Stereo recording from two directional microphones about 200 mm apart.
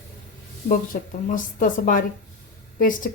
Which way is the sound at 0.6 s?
45° left (ahead or behind).